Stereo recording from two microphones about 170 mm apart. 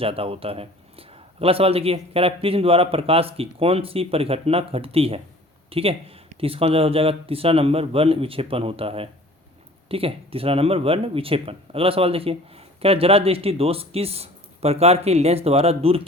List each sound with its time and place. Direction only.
0.0 s speech: 35° right (ahead or behind)